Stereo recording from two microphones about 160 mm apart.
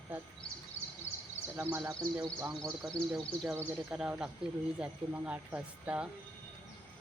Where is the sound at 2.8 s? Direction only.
Centre (ahead or behind).